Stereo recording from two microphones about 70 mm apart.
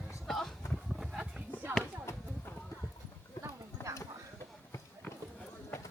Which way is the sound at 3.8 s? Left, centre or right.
Left.